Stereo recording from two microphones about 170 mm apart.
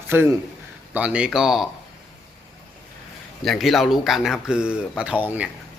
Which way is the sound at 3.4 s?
Centre (ahead or behind).